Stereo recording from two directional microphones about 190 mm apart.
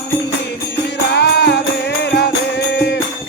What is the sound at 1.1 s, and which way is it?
Music, 60° left (ahead or behind).